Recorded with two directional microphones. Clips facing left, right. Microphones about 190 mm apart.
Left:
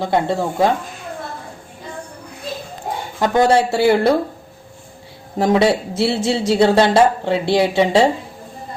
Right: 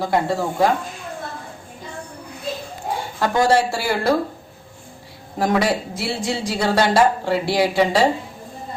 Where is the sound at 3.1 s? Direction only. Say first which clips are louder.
Left 3 dB; 20° left (ahead or behind).